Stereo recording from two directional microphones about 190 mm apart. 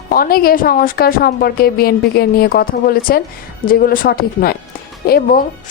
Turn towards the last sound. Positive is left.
turn(degrees=55)  # may be behind; listen again after turning